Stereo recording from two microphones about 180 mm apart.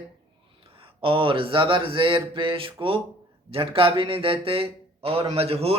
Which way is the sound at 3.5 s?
30° right (ahead or behind).